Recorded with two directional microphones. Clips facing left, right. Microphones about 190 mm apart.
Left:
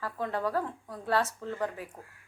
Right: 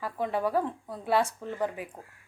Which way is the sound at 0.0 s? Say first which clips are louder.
Right 3 dB; 15° right (ahead or behind).